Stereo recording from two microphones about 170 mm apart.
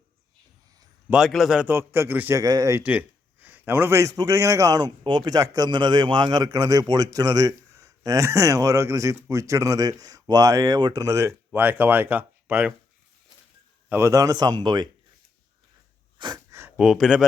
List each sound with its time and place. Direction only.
1.1 s a man's voice: centre (ahead or behind)
13.9 s a man's voice: 15° right (ahead or behind)
16.1 s wheeze: 25° right (ahead or behind)
16.7 s speech: 5° right (ahead or behind)